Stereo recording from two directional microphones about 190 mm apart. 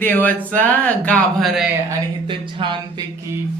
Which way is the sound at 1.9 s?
25° right (ahead or behind).